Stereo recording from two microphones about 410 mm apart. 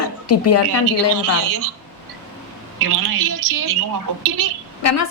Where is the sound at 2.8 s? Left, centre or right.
Right.